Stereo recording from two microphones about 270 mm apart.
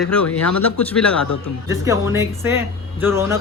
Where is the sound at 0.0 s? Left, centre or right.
Centre.